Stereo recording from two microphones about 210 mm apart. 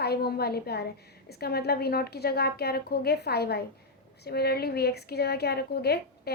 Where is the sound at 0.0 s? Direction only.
50° left (ahead or behind).